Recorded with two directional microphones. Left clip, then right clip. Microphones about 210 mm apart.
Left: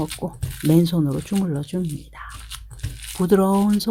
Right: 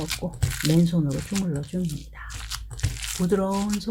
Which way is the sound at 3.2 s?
50° left (ahead or behind).